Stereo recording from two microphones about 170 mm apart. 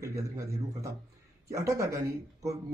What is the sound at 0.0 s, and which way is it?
A man's voice, 15° right (ahead or behind).